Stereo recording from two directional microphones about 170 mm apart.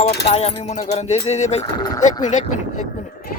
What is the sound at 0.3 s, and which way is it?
Speech, 40° left (ahead or behind).